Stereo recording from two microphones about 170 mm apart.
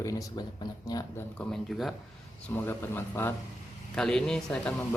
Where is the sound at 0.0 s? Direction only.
20° left (ahead or behind).